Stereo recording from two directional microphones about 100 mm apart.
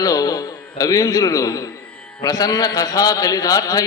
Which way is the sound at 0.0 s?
40° left (ahead or behind).